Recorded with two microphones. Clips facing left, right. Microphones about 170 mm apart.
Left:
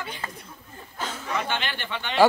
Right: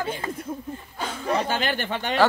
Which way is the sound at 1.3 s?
40° right (ahead or behind).